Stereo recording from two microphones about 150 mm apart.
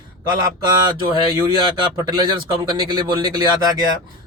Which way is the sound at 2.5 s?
30° right (ahead or behind).